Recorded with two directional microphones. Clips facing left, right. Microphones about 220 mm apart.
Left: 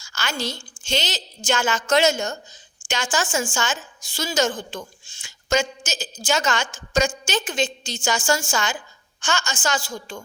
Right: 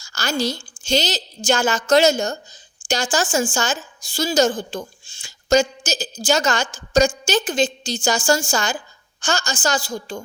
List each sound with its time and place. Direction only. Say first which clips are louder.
0.0 s a woman's voice: right 6 dB; 40° right (ahead or behind)